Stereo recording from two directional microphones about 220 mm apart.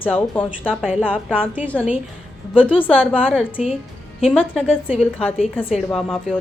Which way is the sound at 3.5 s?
5° right (ahead or behind).